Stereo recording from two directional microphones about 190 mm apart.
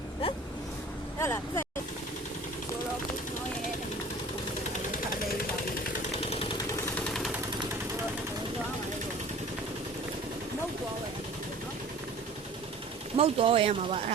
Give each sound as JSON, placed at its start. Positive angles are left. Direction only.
{"t": 1.2, "sound": "speech", "side_deg": 15}
{"t": 13.1, "sound": "speech", "side_deg": -30}